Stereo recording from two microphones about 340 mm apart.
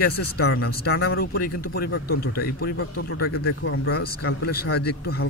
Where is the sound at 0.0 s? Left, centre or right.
Left.